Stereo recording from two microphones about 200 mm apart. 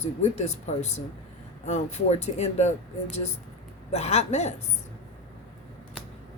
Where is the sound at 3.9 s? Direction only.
35° left (ahead or behind).